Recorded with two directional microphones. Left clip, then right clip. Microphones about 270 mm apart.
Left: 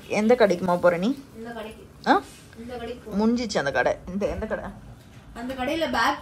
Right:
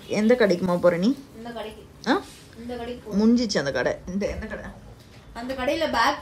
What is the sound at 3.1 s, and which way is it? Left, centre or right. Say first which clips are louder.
Speech: right 2 dB; centre.